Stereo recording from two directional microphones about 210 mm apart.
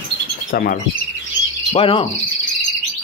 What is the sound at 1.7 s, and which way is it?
Speech, 25° left (ahead or behind).